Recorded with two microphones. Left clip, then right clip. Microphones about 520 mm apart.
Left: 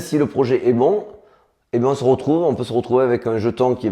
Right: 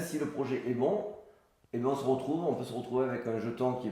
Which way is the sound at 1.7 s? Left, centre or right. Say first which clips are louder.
Left 14 dB; left.